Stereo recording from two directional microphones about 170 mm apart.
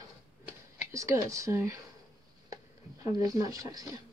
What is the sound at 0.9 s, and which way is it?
Speech, 15° right (ahead or behind).